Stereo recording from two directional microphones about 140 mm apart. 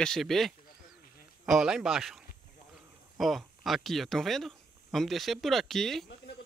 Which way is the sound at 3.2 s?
Centre (ahead or behind).